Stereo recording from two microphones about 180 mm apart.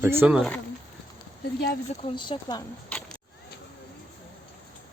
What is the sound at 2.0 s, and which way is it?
Speech, 30° left (ahead or behind).